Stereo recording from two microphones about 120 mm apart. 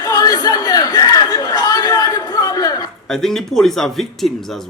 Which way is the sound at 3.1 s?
5° left (ahead or behind).